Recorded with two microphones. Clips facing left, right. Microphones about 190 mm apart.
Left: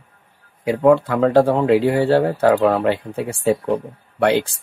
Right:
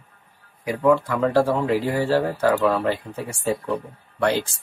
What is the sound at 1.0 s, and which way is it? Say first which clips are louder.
Speech: left 5 dB; 60° left (ahead or behind).